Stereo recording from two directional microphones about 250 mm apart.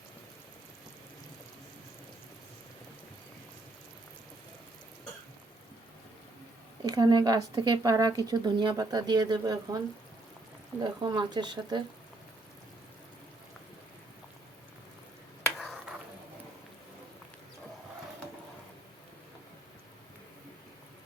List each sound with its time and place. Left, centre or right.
6.8 s speech: centre
10.8 s speech: centre
15.5 s a sound: centre